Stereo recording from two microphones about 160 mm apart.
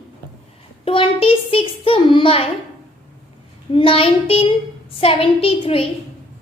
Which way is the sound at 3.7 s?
35° left (ahead or behind).